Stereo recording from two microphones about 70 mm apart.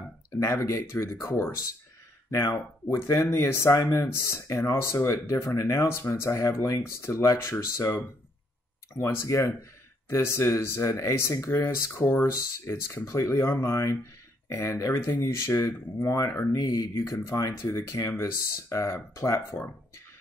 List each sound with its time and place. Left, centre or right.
0.4 s speech: left
2.3 s speech: left
8.9 s speech: left
16.5 s speech: left